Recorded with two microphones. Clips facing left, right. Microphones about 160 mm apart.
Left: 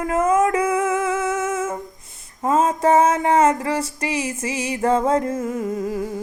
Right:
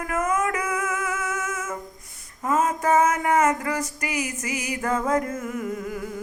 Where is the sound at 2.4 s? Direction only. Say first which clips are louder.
Left 5 dB; 30° left (ahead or behind).